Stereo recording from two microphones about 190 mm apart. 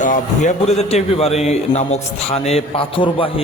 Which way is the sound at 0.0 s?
40° left (ahead or behind).